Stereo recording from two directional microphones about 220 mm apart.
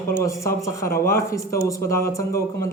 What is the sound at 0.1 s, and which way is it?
Speech, 15° left (ahead or behind).